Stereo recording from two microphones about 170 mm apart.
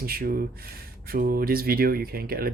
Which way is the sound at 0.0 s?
60° right (ahead or behind).